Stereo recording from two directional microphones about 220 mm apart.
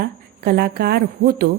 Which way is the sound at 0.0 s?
45° right (ahead or behind).